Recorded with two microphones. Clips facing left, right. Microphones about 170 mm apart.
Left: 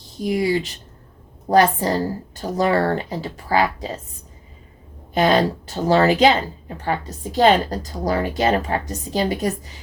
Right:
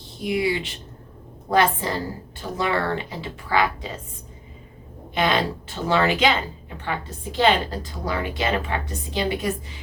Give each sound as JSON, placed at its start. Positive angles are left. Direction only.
{"t": 0.0, "sound": "a woman's voice", "side_deg": 40}
{"t": 5.1, "sound": "a woman's voice", "side_deg": 40}